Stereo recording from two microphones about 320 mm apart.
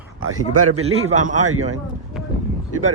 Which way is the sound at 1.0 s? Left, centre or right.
Right.